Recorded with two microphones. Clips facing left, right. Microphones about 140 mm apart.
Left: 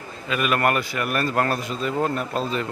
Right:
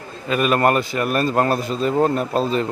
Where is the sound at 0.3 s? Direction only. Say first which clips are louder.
Right 5 dB; 35° right (ahead or behind).